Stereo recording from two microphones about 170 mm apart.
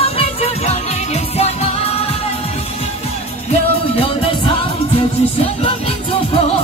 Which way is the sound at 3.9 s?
35° left (ahead or behind).